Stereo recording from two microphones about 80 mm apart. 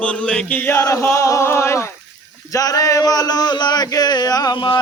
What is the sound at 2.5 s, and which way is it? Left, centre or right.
Speech, left.